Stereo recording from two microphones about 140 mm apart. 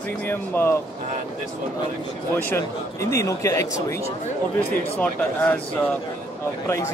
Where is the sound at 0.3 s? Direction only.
15° left (ahead or behind).